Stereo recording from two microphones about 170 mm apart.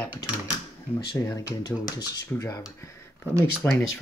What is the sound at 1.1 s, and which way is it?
Speech, 20° left (ahead or behind).